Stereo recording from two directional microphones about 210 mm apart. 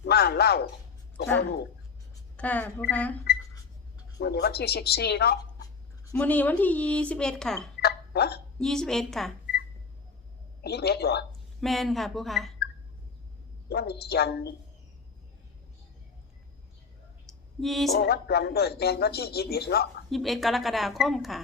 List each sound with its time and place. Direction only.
0.0 s a sound: 50° left (ahead or behind)
2.3 s speech: 5° left (ahead or behind)
4.2 s speech: 50° left (ahead or behind)
6.1 s speech: 10° left (ahead or behind)
7.8 s a sound: 50° left (ahead or behind)
8.5 s speech: 5° left (ahead or behind)
10.6 s speech: 50° left (ahead or behind)
11.3 s speech: centre (ahead or behind)
13.7 s speech: 50° left (ahead or behind)
17.6 s speech: centre (ahead or behind)
17.9 s speech: 50° left (ahead or behind)
20.1 s speech: centre (ahead or behind)